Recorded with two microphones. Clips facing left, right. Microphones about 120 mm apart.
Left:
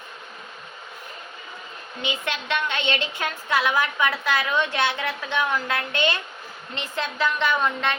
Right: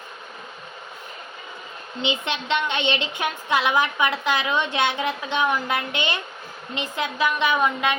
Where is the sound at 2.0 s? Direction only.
20° right (ahead or behind).